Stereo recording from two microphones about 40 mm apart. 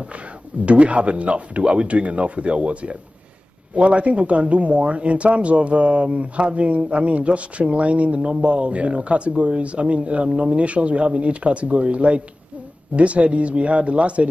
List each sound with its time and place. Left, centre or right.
0.7 s speech: right